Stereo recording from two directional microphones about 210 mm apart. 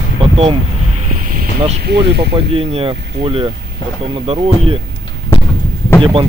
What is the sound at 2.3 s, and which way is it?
Speech, 25° right (ahead or behind).